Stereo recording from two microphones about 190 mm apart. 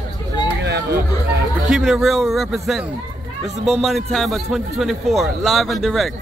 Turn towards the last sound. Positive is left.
turn(degrees=0)  # may be behind; listen again after turning